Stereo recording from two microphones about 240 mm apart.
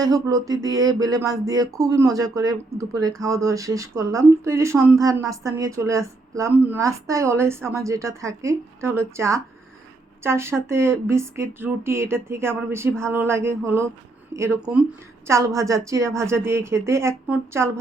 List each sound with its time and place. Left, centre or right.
0.0 s speech: centre